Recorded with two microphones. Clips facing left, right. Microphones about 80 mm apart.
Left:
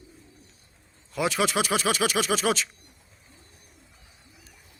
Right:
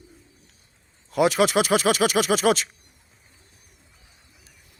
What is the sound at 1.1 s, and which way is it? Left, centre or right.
Speech, right.